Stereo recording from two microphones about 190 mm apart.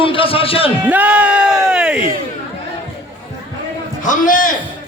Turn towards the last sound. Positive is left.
turn(degrees=45)  # may be behind; listen again after turning